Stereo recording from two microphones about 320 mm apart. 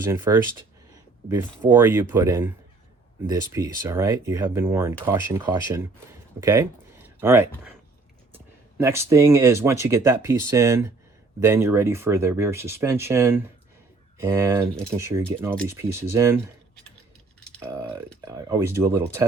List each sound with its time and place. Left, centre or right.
0.0 s speech: centre
1.7 s speech: centre
8.8 s speech: centre
17.6 s speech: centre